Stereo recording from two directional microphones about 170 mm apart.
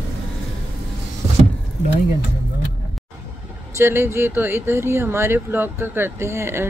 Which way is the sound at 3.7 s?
15° right (ahead or behind).